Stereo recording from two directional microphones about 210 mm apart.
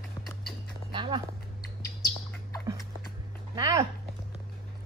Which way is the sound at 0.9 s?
20° right (ahead or behind).